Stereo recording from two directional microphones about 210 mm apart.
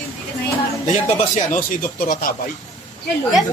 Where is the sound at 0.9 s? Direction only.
35° left (ahead or behind).